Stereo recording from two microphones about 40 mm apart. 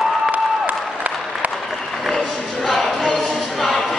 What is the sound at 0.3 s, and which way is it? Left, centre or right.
Applause, right.